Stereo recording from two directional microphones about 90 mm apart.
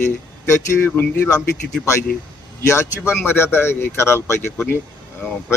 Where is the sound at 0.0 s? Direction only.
30° left (ahead or behind).